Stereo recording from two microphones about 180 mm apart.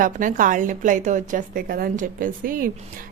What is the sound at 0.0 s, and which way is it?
A woman's voice, 45° right (ahead or behind).